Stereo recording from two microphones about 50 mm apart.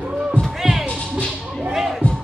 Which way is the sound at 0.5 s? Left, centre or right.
Centre.